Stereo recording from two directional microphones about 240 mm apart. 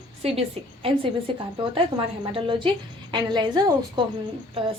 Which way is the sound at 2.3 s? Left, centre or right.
Centre.